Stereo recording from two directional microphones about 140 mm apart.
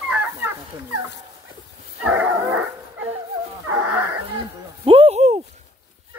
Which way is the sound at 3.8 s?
15° right (ahead or behind).